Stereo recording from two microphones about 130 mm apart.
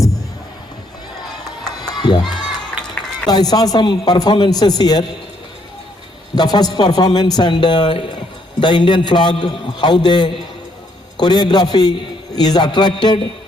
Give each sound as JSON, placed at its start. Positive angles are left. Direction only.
{"t": 1.9, "sound": "crowd", "side_deg": 35}
{"t": 2.6, "sound": "run", "side_deg": 5}
{"t": 3.2, "sound": "a man's voice", "side_deg": 30}
{"t": 6.3, "sound": "a man's voice", "side_deg": 30}